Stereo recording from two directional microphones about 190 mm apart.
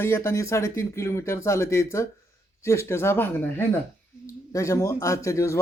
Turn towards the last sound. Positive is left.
turn(degrees=15)  # may be behind; listen again after turning